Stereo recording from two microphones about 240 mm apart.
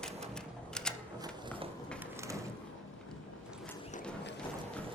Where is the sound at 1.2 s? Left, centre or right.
Centre.